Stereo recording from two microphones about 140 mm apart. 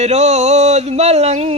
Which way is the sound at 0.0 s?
50° right (ahead or behind).